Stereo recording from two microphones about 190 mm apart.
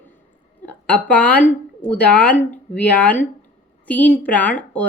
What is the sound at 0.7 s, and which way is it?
A woman's voice, 5° left (ahead or behind).